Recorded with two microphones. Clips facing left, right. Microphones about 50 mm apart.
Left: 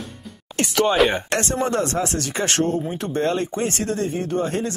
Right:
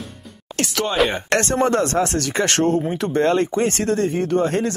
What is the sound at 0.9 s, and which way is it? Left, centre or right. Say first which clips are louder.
Speech: even; centre.